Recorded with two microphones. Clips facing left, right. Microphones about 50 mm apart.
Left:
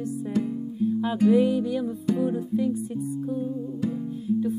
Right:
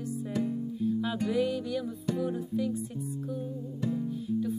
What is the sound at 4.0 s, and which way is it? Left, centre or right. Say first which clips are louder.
Music: left 5 dB; centre.